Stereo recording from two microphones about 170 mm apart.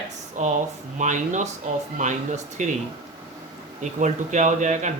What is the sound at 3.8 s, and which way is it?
Speech, 45° right (ahead or behind).